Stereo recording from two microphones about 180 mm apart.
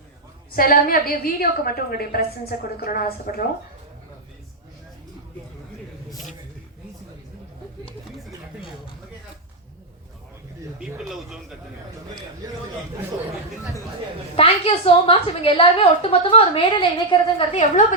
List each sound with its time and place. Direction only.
0.5 s a woman's voice: 50° left (ahead or behind)
6.1 s a sound: centre (ahead or behind)
10.8 s speech: centre (ahead or behind)
14.3 s a woman's voice: 30° left (ahead or behind)